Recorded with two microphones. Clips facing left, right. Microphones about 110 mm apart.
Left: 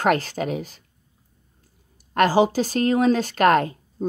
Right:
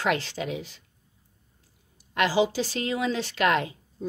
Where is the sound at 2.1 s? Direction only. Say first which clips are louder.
Left 6 dB; 45° left (ahead or behind).